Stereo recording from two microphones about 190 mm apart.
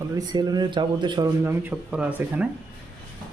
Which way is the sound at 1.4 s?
10° right (ahead or behind).